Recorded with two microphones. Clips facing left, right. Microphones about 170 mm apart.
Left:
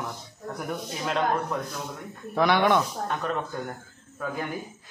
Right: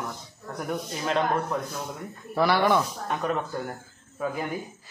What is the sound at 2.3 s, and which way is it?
Speech, 5° right (ahead or behind).